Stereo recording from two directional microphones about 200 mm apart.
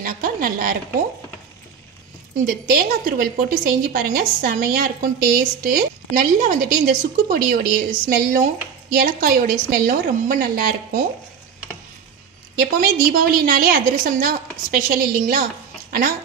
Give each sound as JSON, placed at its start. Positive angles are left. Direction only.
{"t": 0.0, "sound": "a sound", "side_deg": -45}
{"t": 2.4, "sound": "a woman's voice", "side_deg": -45}
{"t": 12.5, "sound": "a woman's voice", "side_deg": -50}